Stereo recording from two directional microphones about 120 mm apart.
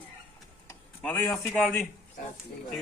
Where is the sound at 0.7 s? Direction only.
20° left (ahead or behind).